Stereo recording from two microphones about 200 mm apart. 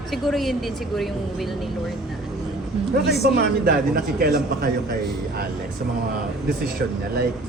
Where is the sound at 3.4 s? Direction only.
50° right (ahead or behind).